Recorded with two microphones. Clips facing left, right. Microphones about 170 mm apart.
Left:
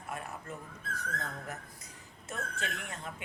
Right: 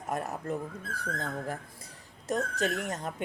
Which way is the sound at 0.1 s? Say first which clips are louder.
Right 9 dB; 40° right (ahead or behind).